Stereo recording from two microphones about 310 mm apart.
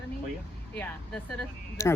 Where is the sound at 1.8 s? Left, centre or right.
Centre.